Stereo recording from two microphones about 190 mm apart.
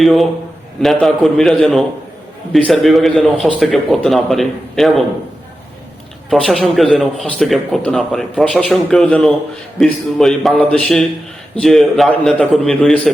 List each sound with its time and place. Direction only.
0.0 s speech: centre (ahead or behind)
6.3 s speech: centre (ahead or behind)